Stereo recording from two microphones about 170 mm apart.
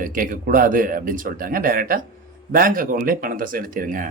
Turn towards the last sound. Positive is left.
turn(degrees=-55)  # may be behind; listen again after turning